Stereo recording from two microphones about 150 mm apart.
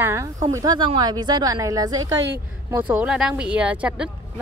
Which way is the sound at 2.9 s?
10° right (ahead or behind).